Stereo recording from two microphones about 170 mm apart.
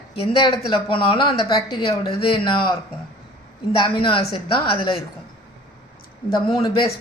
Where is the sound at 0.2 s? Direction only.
30° left (ahead or behind).